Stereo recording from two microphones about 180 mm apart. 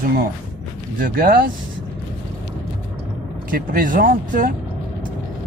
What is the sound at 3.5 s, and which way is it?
Speech, 50° right (ahead or behind).